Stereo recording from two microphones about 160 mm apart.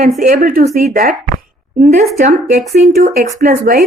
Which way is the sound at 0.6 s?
45° right (ahead or behind).